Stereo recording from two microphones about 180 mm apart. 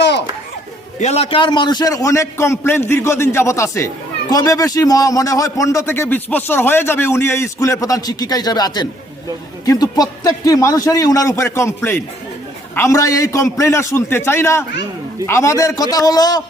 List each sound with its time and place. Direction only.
0.9 s a man's voice: 40° left (ahead or behind); by 16.4 s 20° left (ahead or behind)